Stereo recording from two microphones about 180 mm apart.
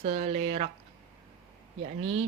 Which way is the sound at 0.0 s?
35° right (ahead or behind).